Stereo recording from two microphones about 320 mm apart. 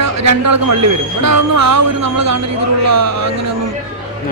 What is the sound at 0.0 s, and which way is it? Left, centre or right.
A man's voice, right.